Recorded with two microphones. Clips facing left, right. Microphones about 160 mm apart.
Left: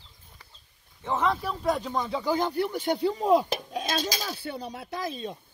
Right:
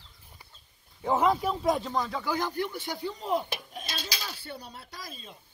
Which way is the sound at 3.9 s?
45° left (ahead or behind).